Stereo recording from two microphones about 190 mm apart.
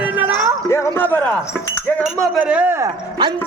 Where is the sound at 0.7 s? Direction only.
10° left (ahead or behind).